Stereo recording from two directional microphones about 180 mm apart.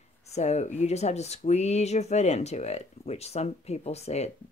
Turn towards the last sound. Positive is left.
turn(degrees=35)  # may be behind; listen again after turning